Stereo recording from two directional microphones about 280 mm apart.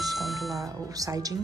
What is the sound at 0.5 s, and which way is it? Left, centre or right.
Speech, centre.